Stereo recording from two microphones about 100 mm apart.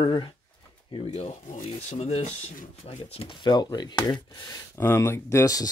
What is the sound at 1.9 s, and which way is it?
Speech, 90° left.